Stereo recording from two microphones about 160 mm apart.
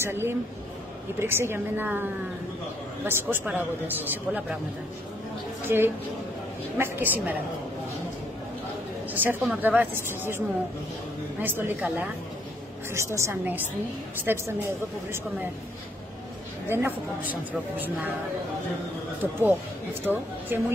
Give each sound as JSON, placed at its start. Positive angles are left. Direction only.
{"t": 0.0, "sound": "a woman's voice", "side_deg": -15}
{"t": 3.1, "sound": "a woman's voice", "side_deg": -15}
{"t": 5.6, "sound": "a woman's voice", "side_deg": -15}
{"t": 9.1, "sound": "a woman's voice", "side_deg": -10}
{"t": 11.4, "sound": "a woman's voice", "side_deg": -15}
{"t": 12.9, "sound": "a woman's voice", "side_deg": -15}
{"t": 16.6, "sound": "a woman's voice", "side_deg": -15}
{"t": 19.4, "sound": "a woman's voice", "side_deg": -15}